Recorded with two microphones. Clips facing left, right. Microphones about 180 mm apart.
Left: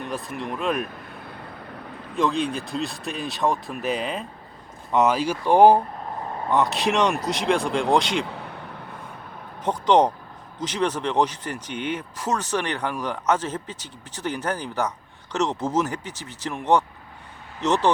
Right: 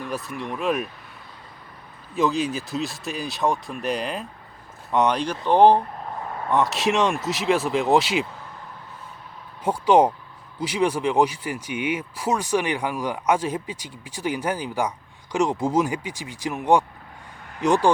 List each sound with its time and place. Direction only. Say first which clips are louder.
0.0 s speech: even; centre (ahead or behind)
1.1 s vehicle: left 7 dB; 60° left (ahead or behind)
2.1 s speech: right 1 dB; centre (ahead or behind)
6.5 s speech: even; centre (ahead or behind)
8.3 s vehicle: left 5 dB; 70° left (ahead or behind)
9.6 s speech: right 1 dB; 10° right (ahead or behind)